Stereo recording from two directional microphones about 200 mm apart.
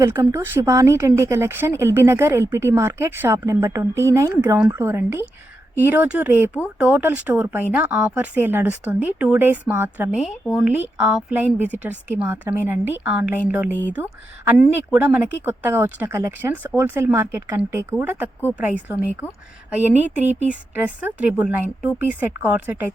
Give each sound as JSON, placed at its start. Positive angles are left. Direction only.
{"t": 0.0, "sound": "speech", "side_deg": -15}
{"t": 20.1, "sound": "speech", "side_deg": -35}
{"t": 20.5, "sound": "speech", "side_deg": -10}